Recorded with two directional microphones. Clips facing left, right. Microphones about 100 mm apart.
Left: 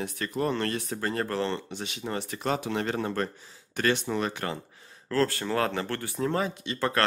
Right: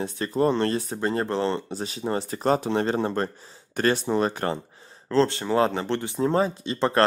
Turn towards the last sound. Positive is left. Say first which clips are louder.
# right 5 dB
turn(degrees=-30)  # may be behind; listen again after turning